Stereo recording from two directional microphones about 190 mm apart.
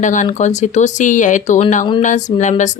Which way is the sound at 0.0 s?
40° left (ahead or behind).